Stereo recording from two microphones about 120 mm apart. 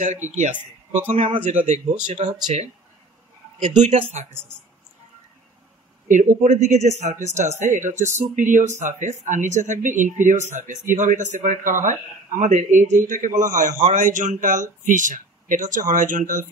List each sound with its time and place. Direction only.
0.0 s speech: 85° right
1.1 s a man's voice: 45° right (ahead or behind)
3.6 s speech: 85° right
6.0 s speech: 90° right